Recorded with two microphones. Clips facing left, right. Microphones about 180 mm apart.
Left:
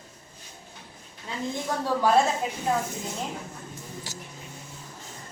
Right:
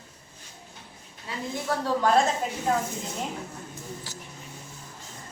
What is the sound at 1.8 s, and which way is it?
Speech, 10° left (ahead or behind).